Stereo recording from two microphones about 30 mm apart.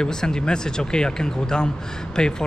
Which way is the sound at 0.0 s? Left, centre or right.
Left.